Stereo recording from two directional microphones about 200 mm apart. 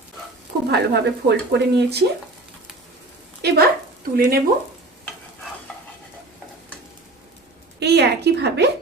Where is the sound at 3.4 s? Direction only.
55° right (ahead or behind).